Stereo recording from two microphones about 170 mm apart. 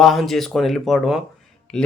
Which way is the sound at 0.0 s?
Centre (ahead or behind).